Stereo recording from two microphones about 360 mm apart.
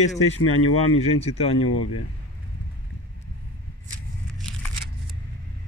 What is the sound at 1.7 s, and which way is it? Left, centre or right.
Speech, left.